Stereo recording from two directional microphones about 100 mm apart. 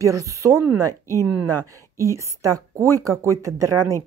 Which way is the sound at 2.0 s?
30° right (ahead or behind).